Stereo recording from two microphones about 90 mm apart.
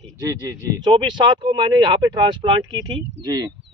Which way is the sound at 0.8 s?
65° right (ahead or behind).